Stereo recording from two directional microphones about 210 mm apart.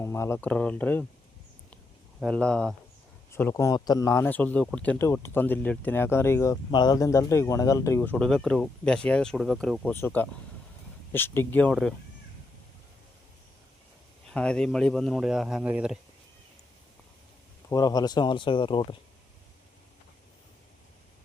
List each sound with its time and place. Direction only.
0.0 s a man's voice: 10° left (ahead or behind)
2.2 s a man's voice: 5° left (ahead or behind)
14.3 s speech: 5° left (ahead or behind)
17.7 s speech: 15° left (ahead or behind)